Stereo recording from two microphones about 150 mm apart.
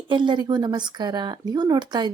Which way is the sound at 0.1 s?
30° right (ahead or behind).